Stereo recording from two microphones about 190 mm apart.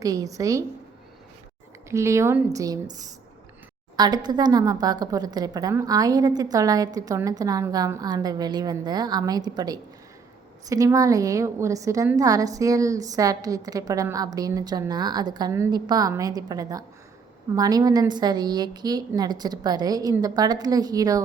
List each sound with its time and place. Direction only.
0.0 s a woman's voice: 20° right (ahead or behind)
1.9 s a woman's voice: 15° right (ahead or behind)
3.9 s a woman's voice: 20° right (ahead or behind)